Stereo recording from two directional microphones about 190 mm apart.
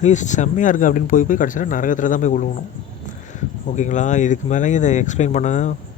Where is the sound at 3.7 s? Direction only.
40° left (ahead or behind).